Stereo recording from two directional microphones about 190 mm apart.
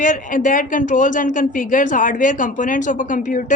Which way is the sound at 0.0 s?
45° left (ahead or behind).